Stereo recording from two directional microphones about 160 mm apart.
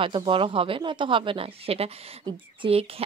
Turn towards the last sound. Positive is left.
turn(degrees=-35)  # may be behind; listen again after turning